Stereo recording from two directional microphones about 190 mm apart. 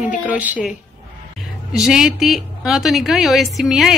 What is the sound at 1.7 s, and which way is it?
A woman's voice, 5° right (ahead or behind).